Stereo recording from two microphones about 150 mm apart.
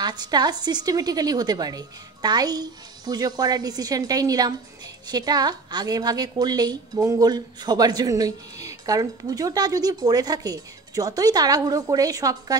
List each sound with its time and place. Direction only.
0.0 s a woman's voice: 30° right (ahead or behind)